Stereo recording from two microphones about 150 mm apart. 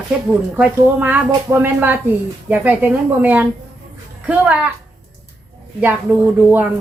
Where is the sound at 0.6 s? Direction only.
10° right (ahead or behind).